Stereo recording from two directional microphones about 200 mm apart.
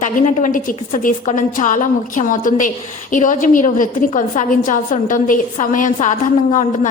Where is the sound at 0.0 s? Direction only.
40° left (ahead or behind).